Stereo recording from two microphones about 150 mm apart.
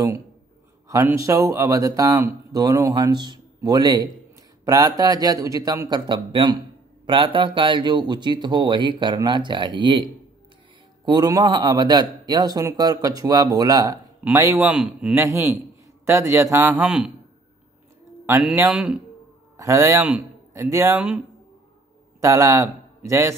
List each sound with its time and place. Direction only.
0.8 s speech: 20° right (ahead or behind)
11.1 s speech: 25° right (ahead or behind)
14.7 s speech: 5° right (ahead or behind)
15.1 s a man's voice: 20° right (ahead or behind)
16.7 s speech: 5° right (ahead or behind)
18.4 s a man's voice: 10° right (ahead or behind)
19.5 s speech: 20° right (ahead or behind)
22.2 s a man's voice: 20° right (ahead or behind)